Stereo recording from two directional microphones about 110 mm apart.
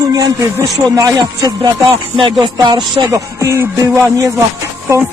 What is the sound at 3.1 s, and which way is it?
Speech, 30° right (ahead or behind).